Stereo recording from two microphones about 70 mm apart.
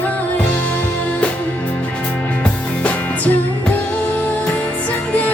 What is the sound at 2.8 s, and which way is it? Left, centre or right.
Music, left.